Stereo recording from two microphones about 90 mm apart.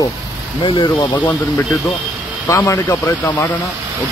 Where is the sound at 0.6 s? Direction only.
65° left (ahead or behind).